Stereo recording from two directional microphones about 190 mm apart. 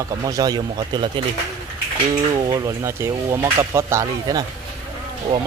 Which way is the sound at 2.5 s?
15° right (ahead or behind).